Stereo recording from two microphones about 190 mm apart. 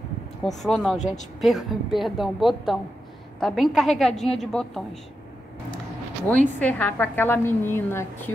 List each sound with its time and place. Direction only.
0.6 s a woman's voice: centre (ahead or behind)
0.9 s speech: 40° left (ahead or behind)
1.4 s a woman's voice: centre (ahead or behind)
6.2 s a woman's voice: 10° left (ahead or behind)